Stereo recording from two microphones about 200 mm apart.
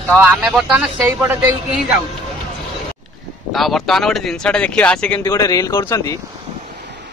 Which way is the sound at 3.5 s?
Centre (ahead or behind).